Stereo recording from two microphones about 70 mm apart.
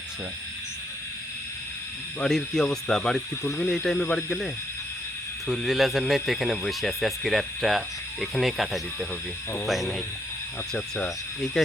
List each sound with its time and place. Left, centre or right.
2.2 s speech: centre
5.5 s speech: centre
10.8 s speech: centre
11.3 s speech: centre